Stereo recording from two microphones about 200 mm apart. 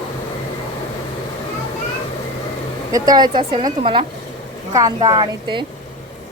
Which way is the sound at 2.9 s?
20° right (ahead or behind).